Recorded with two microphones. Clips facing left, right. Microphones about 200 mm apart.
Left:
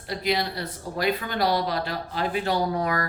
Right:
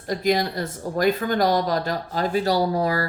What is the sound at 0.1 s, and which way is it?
Speech, 45° right (ahead or behind).